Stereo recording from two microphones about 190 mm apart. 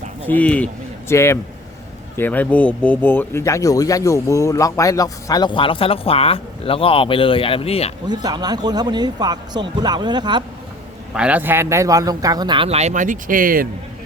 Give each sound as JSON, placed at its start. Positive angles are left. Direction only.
{"t": 0.3, "sound": "speech", "side_deg": 5}
{"t": 8.0, "sound": "a man's voice", "side_deg": -20}
{"t": 11.1, "sound": "a man's voice", "side_deg": -5}